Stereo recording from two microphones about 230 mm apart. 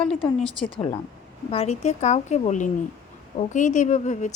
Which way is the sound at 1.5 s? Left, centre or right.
Left.